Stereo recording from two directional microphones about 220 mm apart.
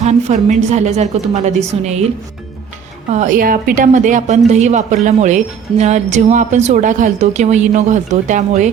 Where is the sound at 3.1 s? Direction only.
35° right (ahead or behind).